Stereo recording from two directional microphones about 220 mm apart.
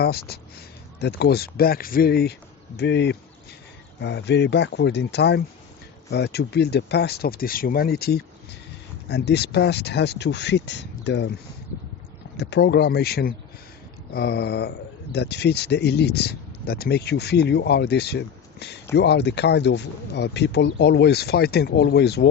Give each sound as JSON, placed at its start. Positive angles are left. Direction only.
{"t": 0.0, "sound": "speech", "side_deg": 45}
{"t": 12.4, "sound": "speech", "side_deg": 50}